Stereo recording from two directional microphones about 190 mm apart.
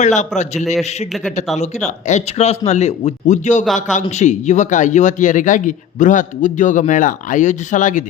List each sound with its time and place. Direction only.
0.0 s speech: 40° left (ahead or behind)
0.6 s a man's voice: centre (ahead or behind)
1.5 s speech: 40° left (ahead or behind)